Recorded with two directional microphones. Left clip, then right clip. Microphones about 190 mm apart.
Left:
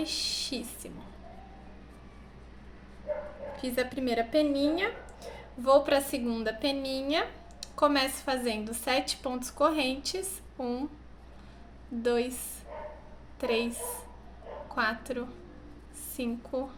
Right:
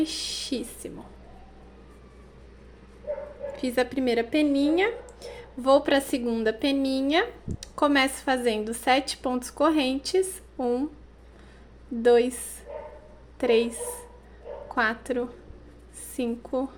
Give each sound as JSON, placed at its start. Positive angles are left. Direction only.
{"t": 0.0, "sound": "a sound", "side_deg": -45}
{"t": 3.6, "sound": "a woman's voice", "side_deg": -45}
{"t": 12.0, "sound": "a woman's voice", "side_deg": -45}
{"t": 14.8, "sound": "a woman's voice", "side_deg": -45}